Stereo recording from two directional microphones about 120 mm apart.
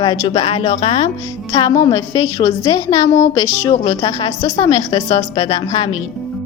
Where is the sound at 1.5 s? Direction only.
35° left (ahead or behind).